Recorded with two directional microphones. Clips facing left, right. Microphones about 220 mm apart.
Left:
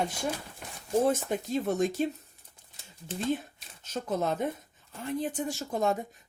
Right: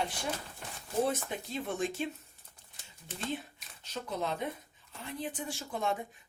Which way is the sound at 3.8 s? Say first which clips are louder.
Left 6 dB; 45° left (ahead or behind).